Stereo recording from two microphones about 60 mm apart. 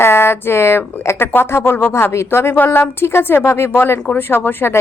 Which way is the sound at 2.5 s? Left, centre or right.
Left.